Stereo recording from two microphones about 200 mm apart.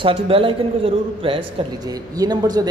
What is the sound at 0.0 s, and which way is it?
A man's voice, 25° right (ahead or behind).